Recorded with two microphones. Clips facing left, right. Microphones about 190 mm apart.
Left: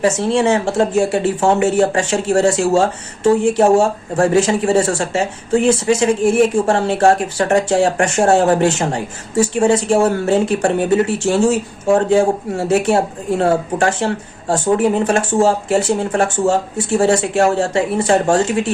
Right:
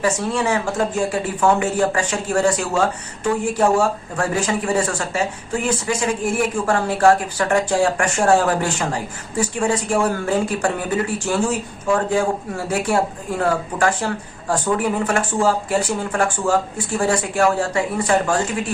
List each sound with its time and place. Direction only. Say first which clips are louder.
0.0 s speech: left 6 dB; 25° left (ahead or behind)